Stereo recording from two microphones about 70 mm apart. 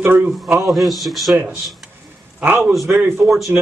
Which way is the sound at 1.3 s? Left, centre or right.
Right.